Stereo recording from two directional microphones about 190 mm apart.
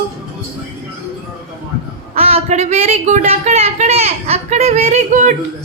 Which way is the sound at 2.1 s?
30° right (ahead or behind).